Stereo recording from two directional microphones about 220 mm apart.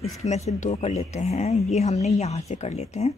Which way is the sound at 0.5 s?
30° left (ahead or behind).